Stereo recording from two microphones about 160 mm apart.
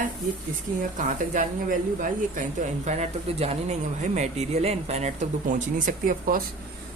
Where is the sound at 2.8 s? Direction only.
45° right (ahead or behind).